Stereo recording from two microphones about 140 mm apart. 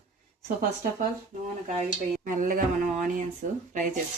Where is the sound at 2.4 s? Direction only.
70° right (ahead or behind).